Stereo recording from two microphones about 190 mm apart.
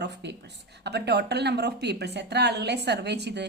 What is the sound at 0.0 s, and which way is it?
A woman's voice, 65° right (ahead or behind).